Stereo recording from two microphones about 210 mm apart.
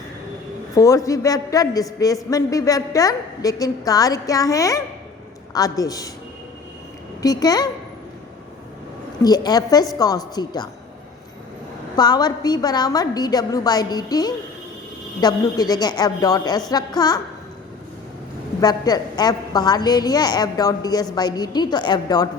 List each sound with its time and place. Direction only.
0.8 s a woman's voice: 15° left (ahead or behind)
7.2 s a woman's voice: 15° left (ahead or behind)
9.2 s a woman's voice: 20° left (ahead or behind)
11.9 s a woman's voice: 20° left (ahead or behind)
18.6 s a woman's voice: 20° left (ahead or behind)